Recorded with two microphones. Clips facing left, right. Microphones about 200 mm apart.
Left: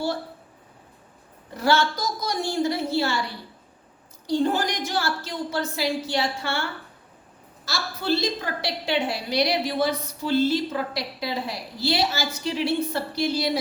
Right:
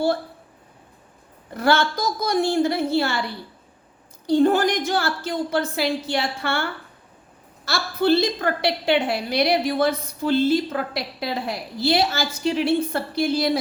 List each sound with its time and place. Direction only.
1.5 s a woman's voice: 55° right (ahead or behind)
4.3 s a woman's voice: 55° right (ahead or behind)